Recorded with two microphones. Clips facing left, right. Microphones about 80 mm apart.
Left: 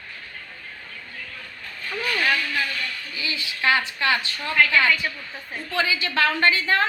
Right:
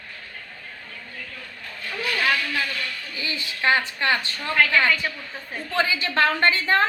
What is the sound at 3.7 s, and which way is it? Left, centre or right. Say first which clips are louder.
A woman's voice: even; right.